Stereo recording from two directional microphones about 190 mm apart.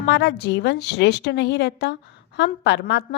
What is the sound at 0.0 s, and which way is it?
A woman's voice, 65° left (ahead or behind).